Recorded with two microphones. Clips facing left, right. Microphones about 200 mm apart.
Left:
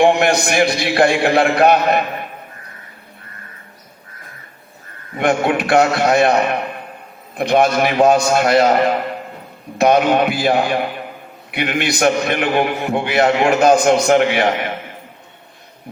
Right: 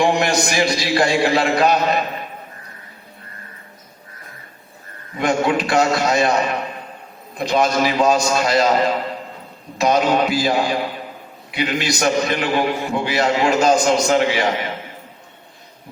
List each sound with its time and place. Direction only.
0.0 s a man's voice: 60° left (ahead or behind)
5.1 s a man's voice: 60° left (ahead or behind)